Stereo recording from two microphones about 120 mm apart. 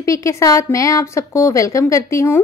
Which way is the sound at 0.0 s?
25° left (ahead or behind).